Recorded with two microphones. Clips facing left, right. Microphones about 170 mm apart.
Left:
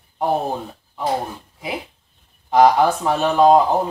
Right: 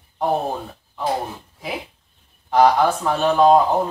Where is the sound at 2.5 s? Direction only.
10° left (ahead or behind).